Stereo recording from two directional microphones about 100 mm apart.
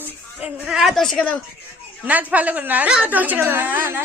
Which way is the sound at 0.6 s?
5° right (ahead or behind).